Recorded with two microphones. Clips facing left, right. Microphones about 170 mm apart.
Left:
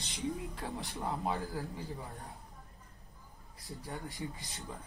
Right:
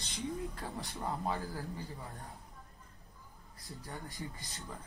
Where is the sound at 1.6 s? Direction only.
Centre (ahead or behind).